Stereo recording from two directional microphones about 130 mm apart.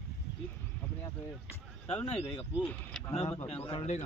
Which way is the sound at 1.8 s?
10° left (ahead or behind).